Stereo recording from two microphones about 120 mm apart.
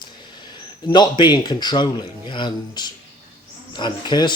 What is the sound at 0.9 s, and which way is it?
Speech, 40° left (ahead or behind).